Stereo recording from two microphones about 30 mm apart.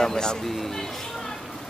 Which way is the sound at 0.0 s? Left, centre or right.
Left.